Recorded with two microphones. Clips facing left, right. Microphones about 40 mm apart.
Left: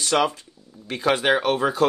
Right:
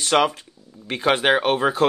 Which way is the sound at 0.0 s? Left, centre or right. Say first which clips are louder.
Right 2 dB; right.